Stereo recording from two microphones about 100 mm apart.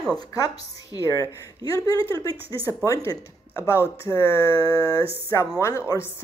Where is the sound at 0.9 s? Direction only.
35° left (ahead or behind).